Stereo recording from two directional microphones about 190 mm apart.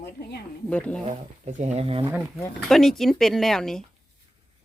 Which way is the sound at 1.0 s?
40° right (ahead or behind).